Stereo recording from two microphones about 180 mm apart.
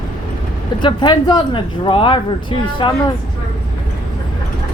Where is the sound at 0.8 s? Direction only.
25° left (ahead or behind).